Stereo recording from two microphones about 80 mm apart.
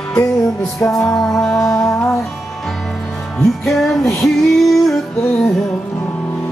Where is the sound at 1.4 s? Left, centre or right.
Centre.